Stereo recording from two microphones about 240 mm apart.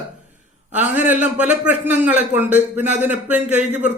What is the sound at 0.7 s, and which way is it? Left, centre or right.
A man's voice, centre.